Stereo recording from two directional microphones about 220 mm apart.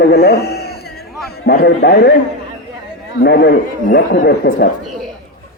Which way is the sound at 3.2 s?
50° left (ahead or behind).